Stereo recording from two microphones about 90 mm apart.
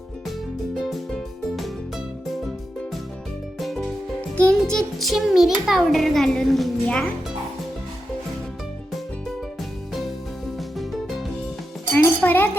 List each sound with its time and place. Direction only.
0.8 s music: 5° left (ahead or behind)
3.6 s music: centre (ahead or behind)
4.4 s a child's voice: 10° left (ahead or behind)
6.8 s speech: 15° left (ahead or behind)
10.6 s music: centre (ahead or behind)
11.9 s a sound: 25° left (ahead or behind)